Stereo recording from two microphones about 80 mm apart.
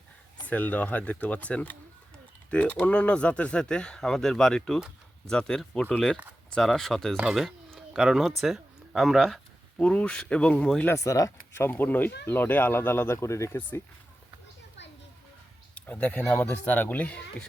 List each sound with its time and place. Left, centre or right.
0.4 s speech: centre
7.3 s a sound: centre
8.4 s speech: centre
10.9 s speech: left
13.6 s speech: left
15.7 s a sound: left
16.5 s speech: left